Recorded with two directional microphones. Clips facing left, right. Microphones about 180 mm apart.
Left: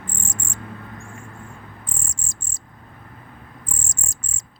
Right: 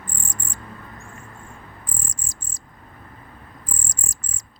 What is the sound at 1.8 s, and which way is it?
Cricket, 25° left (ahead or behind).